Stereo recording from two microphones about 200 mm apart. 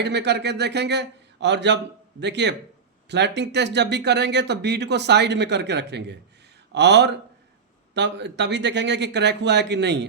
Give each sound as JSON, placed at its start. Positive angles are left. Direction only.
{"t": 0.0, "sound": "speech", "side_deg": -55}